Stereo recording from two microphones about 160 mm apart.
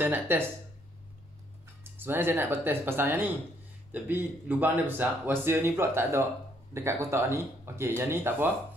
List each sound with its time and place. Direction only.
0.0 s speech: 15° right (ahead or behind)
2.0 s speech: 15° right (ahead or behind)